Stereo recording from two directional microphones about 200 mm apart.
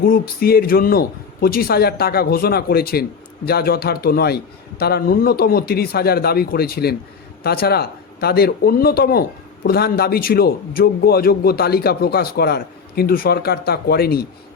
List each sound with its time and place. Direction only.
0.0 s a man's voice: 50° left (ahead or behind)